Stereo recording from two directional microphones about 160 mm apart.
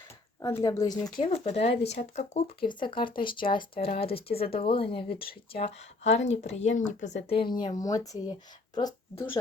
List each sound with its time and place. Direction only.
0.4 s speech: 20° left (ahead or behind); by 2.6 s 45° left (ahead or behind)
2.6 s speech: 30° left (ahead or behind); by 7.1 s 50° left (ahead or behind)
7.3 s speech: 30° left (ahead or behind)